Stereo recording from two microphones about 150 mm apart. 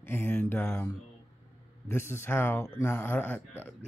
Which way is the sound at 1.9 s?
15° left (ahead or behind).